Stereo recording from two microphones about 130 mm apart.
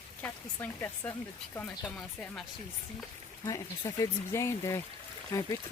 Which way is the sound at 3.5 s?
25° left (ahead or behind).